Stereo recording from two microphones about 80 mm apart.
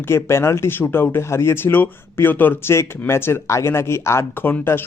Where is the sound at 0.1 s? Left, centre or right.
Left.